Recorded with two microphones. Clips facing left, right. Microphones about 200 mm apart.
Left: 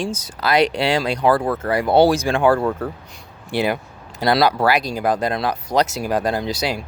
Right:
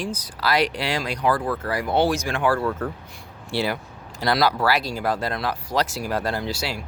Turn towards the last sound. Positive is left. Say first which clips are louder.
# left 5 dB
turn(degrees=20)  # may be behind; listen again after turning